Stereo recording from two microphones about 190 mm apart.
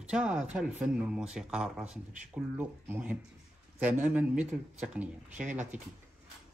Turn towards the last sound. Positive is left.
turn(degrees=-5)  # may be behind; listen again after turning